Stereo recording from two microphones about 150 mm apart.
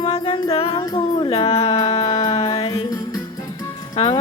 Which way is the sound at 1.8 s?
30° left (ahead or behind).